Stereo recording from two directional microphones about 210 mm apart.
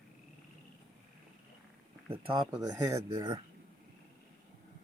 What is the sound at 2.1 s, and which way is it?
Speech, 20° right (ahead or behind).